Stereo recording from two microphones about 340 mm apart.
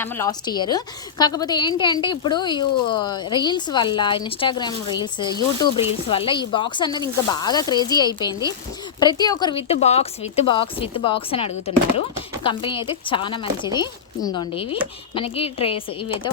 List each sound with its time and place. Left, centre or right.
0.0 s speech: centre